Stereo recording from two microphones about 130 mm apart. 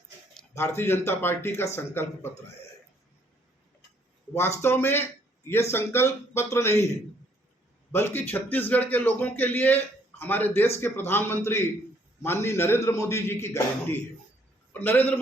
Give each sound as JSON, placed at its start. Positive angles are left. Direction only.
{"t": 0.5, "sound": "a man's voice", "side_deg": 20}
{"t": 4.4, "sound": "a man's voice", "side_deg": 20}
{"t": 7.9, "sound": "a man's voice", "side_deg": 15}